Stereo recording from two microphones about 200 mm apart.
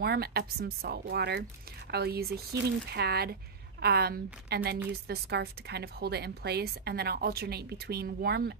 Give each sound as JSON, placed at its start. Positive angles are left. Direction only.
{"t": 0.0, "sound": "a woman's voice", "side_deg": -50}